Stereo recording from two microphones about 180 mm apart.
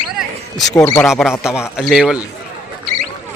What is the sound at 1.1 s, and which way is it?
Speech, 5° right (ahead or behind).